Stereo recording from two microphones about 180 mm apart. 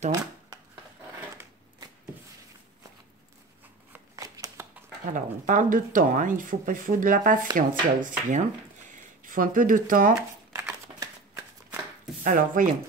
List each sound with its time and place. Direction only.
1.3 s a sound: 15° right (ahead or behind)
4.2 s shuffling cards: 20° right (ahead or behind)
5.0 s speech: 45° right (ahead or behind)
10.5 s shuffling cards: 15° right (ahead or behind)
12.2 s speech: 50° right (ahead or behind)